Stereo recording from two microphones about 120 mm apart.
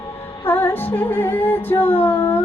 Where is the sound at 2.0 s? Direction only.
15° left (ahead or behind).